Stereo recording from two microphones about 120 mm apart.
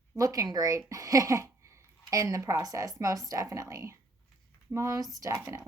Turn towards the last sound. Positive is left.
turn(degrees=-30)  # may be behind; listen again after turning